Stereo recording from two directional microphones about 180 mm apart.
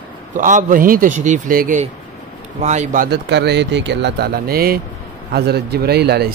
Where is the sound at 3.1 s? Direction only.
70° right (ahead or behind).